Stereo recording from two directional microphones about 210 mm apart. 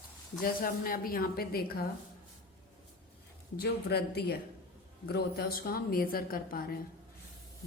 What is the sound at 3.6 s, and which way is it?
A woman's voice, 50° left (ahead or behind).